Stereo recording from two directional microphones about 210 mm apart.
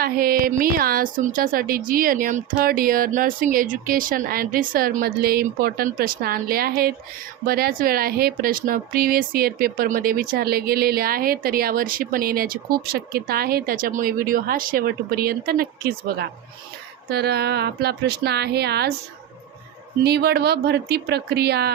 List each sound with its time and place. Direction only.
0.0 s speech: 45° right (ahead or behind)
20.1 s speech: 50° right (ahead or behind)